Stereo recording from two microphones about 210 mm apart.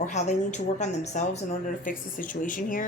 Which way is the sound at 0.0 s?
35° left (ahead or behind).